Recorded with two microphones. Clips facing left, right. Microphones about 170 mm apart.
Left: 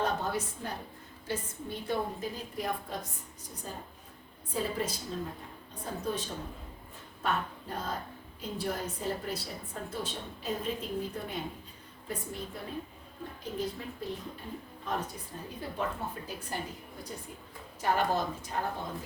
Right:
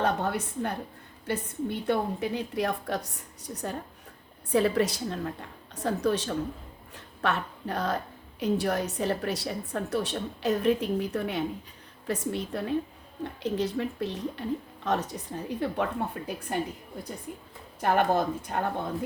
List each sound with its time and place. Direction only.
0.0 s a woman's voice: 65° right (ahead or behind)
17.7 s speech: 55° right (ahead or behind)